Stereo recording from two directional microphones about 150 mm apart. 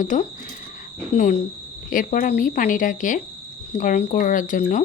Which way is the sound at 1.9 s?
65° left (ahead or behind).